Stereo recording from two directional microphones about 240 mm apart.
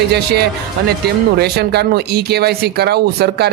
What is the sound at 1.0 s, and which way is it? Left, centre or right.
A man's voice, right.